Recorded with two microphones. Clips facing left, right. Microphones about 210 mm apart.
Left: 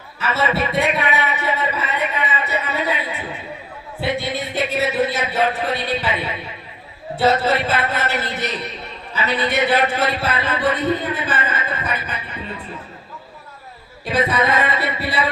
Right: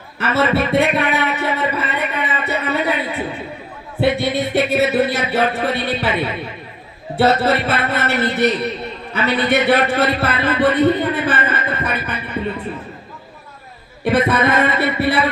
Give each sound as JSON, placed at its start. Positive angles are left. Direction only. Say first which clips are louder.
{"t": 0.2, "sound": "a man's voice", "louder": "right 4 dB", "side_deg": -60}
{"t": 7.2, "sound": "a man's voice", "louder": "right 2 dB", "side_deg": -60}
{"t": 14.0, "sound": "a man's voice", "louder": "right 4 dB", "side_deg": -60}